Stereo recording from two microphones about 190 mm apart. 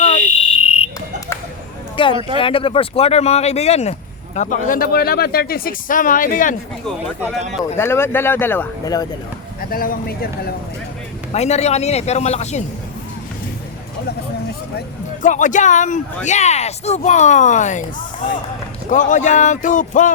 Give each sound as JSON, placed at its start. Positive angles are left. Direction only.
{"t": 0.6, "sound": "fire alarm", "side_deg": 30}
{"t": 2.0, "sound": "speech", "side_deg": 25}
{"t": 7.8, "sound": "speech", "side_deg": 10}
{"t": 9.6, "sound": "speech", "side_deg": 50}
{"t": 11.3, "sound": "speech", "side_deg": 35}
{"t": 15.2, "sound": "speech", "side_deg": 40}
{"t": 18.9, "sound": "speech", "side_deg": 40}